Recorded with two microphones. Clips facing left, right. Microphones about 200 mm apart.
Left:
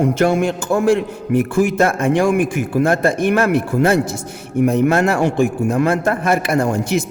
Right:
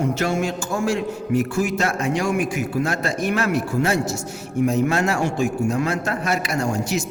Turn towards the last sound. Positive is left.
turn(degrees=55)  # may be behind; listen again after turning